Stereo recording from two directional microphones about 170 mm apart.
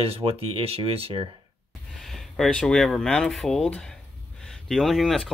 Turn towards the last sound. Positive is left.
turn(degrees=5)  # may be behind; listen again after turning